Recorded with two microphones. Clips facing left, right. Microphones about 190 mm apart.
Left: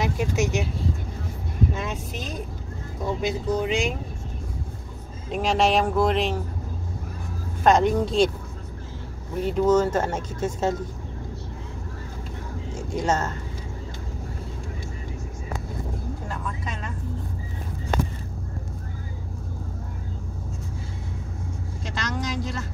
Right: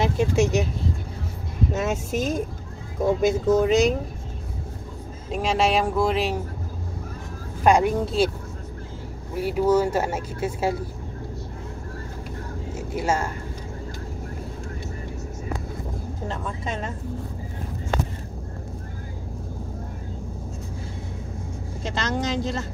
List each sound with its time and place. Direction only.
0.0 s speech: 30° right (ahead or behind)
1.7 s speech: 45° right (ahead or behind)
5.3 s speech: centre (ahead or behind)
7.6 s speech: 10° right (ahead or behind)
9.4 s speech: 10° right (ahead or behind)
12.7 s a woman's voice: 10° right (ahead or behind)
16.3 s vehicle: 25° right (ahead or behind)
21.8 s speech: 25° right (ahead or behind)